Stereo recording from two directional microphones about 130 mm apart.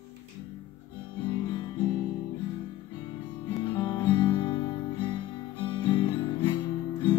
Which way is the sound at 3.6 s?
35° left (ahead or behind).